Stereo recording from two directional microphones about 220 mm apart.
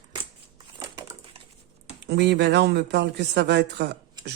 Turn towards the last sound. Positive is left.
turn(degrees=-50)  # may be behind; listen again after turning